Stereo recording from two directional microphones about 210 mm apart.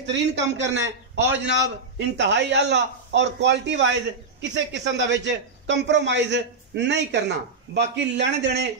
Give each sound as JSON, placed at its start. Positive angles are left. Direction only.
{"t": 0.0, "sound": "a man's voice", "side_deg": -55}